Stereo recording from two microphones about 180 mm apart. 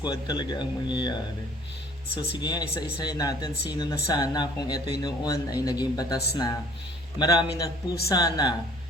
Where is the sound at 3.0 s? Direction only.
20° left (ahead or behind).